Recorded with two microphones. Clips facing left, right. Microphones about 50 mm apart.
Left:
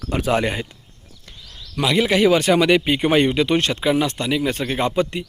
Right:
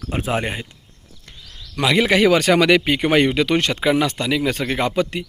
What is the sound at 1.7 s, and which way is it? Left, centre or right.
Speech, right.